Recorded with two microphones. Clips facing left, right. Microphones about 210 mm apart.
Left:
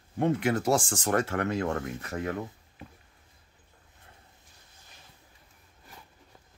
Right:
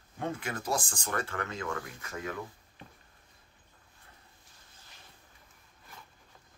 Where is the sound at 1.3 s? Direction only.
70° left (ahead or behind).